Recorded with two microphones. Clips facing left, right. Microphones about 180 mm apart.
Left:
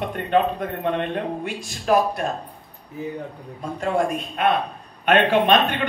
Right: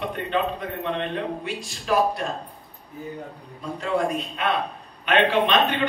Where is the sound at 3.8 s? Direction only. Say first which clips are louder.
Left 2 dB; 50° left (ahead or behind).